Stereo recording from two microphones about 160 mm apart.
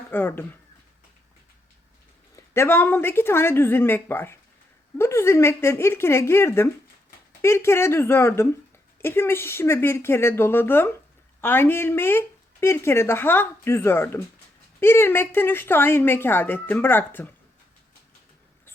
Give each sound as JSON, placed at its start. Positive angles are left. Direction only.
{"t": 0.1, "sound": "speech", "side_deg": 10}
{"t": 2.3, "sound": "speech", "side_deg": 15}